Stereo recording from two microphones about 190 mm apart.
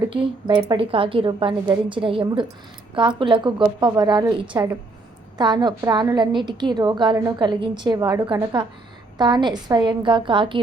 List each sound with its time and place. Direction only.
0.1 s a woman's voice: 20° right (ahead or behind)